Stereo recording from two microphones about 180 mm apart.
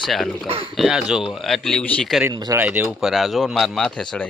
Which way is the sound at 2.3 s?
20° right (ahead or behind).